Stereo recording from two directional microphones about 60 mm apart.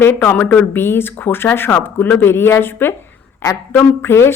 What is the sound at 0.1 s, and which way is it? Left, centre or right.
Speech, left.